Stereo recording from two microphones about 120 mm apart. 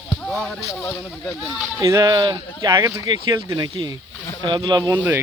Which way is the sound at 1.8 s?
30° right (ahead or behind).